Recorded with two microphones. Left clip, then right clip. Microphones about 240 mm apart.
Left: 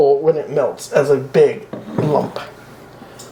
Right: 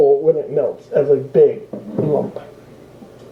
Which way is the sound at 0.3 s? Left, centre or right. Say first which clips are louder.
Even; left.